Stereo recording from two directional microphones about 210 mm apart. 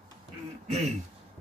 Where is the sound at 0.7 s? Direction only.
30° right (ahead or behind).